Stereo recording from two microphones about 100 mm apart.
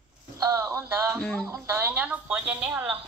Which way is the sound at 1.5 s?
25° right (ahead or behind).